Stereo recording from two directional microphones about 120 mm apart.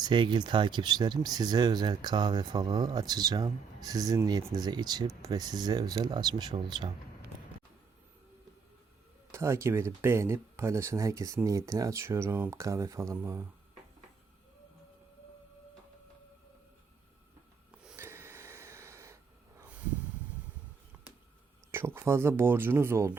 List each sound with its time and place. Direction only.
0.0 s speech: 40° right (ahead or behind)
9.3 s speech: 25° right (ahead or behind)
17.9 s snort: 20° right (ahead or behind)
20.9 s a sound: 15° right (ahead or behind)
21.7 s speech: 20° right (ahead or behind)